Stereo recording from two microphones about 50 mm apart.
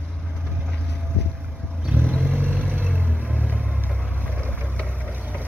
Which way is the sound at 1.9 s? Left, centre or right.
Right.